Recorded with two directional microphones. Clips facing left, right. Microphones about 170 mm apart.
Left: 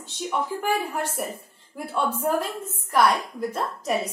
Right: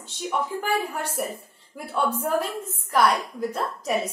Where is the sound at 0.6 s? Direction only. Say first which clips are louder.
Left 1 dB; centre (ahead or behind).